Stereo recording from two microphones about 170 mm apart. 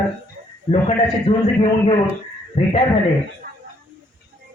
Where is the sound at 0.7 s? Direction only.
35° left (ahead or behind).